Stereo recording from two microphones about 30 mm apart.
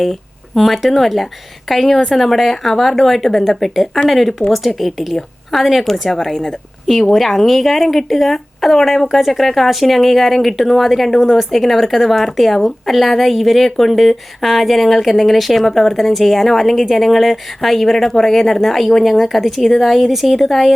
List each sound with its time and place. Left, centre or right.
0.0 s speech: centre
17.9 s speech: centre